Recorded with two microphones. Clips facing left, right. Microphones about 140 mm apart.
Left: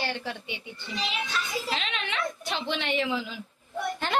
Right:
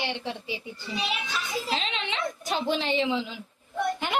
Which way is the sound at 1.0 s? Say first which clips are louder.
Left 1 dB; 5° right (ahead or behind).